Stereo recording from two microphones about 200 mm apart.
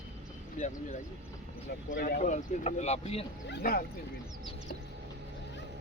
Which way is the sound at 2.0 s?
45° left (ahead or behind).